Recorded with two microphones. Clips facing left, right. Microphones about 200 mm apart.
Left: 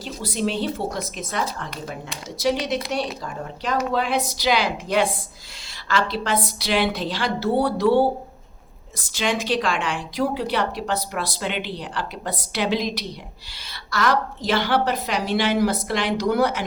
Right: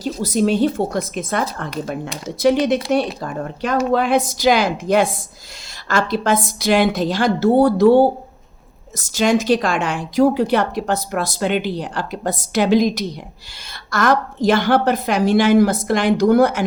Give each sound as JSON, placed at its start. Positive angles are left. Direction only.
{"t": 0.0, "sound": "a woman's voice", "side_deg": -40}